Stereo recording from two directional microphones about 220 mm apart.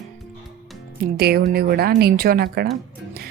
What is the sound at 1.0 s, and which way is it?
A woman's voice, 45° right (ahead or behind).